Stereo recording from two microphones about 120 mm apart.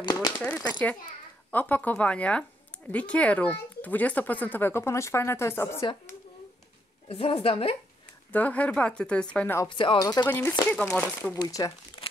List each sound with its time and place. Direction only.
0.0 s typewriter: 35° left (ahead or behind)
1.5 s speech: 15° left (ahead or behind)
7.1 s a woman's voice: 50° left (ahead or behind)
8.3 s speech: 15° left (ahead or behind)
9.7 s a woman's voice: 45° left (ahead or behind)
9.9 s speech: 35° left (ahead or behind)
10.2 s speech: 15° left (ahead or behind)
11.3 s speech: 30° left (ahead or behind)
12.0 s crumpling: 30° left (ahead or behind)